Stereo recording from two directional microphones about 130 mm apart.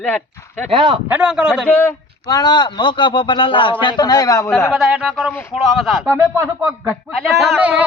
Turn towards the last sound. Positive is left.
turn(degrees=0)  # may be behind; listen again after turning